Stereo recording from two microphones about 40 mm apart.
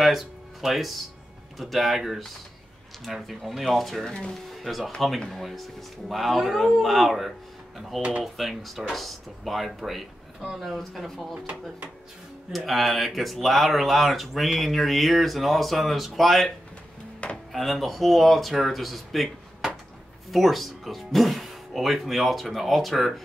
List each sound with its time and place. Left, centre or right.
0.0 s music: centre
0.6 s speech: centre
4.0 s speech: centre
4.5 s speech: centre
12.5 s speech: centre